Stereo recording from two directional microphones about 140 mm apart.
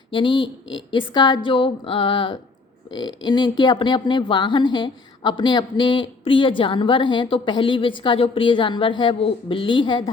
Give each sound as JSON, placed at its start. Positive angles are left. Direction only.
{"t": 0.1, "sound": "speech", "side_deg": 35}